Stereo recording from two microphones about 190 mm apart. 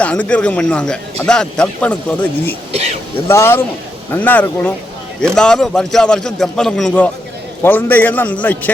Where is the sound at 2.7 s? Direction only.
35° right (ahead or behind).